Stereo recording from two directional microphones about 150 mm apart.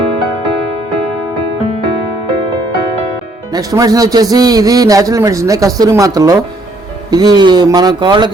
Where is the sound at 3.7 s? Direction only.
25° right (ahead or behind).